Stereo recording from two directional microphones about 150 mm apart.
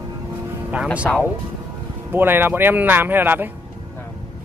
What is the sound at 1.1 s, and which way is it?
Speech, 5° left (ahead or behind).